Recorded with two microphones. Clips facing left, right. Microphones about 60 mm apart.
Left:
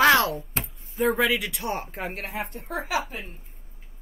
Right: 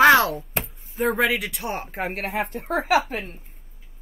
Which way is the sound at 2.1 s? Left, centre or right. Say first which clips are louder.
Right 6 dB; right.